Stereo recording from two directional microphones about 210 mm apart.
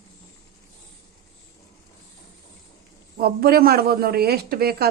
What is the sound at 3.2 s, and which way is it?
A man's voice, 45° right (ahead or behind).